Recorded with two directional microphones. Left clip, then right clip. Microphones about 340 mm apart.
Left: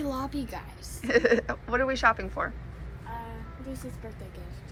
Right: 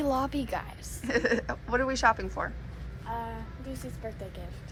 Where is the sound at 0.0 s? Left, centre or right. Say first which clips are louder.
Right 4 dB; centre.